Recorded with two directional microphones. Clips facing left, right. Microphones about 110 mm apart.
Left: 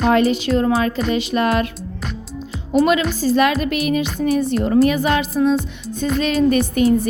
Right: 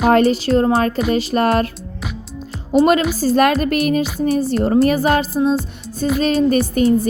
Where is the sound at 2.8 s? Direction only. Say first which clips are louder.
Right 2 dB; 40° right (ahead or behind).